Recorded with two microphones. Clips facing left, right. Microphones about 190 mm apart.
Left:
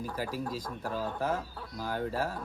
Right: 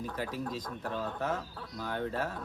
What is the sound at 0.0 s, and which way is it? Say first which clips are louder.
Speech: left 1 dB; 5° left (ahead or behind).